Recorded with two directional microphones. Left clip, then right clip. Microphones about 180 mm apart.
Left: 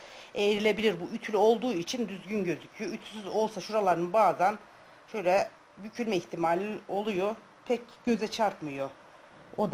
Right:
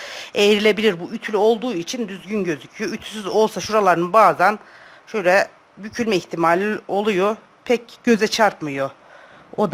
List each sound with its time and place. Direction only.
0.0 s speech: 40° right (ahead or behind)